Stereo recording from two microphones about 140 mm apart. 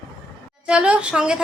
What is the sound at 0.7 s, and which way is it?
Speech, 10° right (ahead or behind).